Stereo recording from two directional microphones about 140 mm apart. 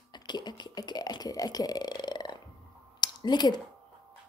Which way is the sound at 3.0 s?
30° left (ahead or behind).